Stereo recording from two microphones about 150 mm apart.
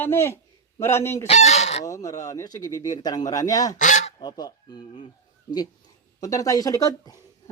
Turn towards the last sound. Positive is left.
turn(degrees=25)  # may be behind; listen again after turning